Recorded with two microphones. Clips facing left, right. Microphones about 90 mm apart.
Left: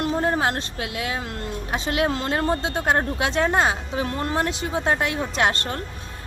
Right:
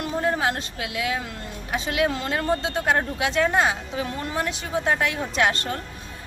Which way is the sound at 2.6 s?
25° left (ahead or behind).